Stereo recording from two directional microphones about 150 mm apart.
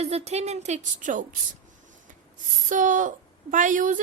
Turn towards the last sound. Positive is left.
turn(degrees=-60)  # may be behind; listen again after turning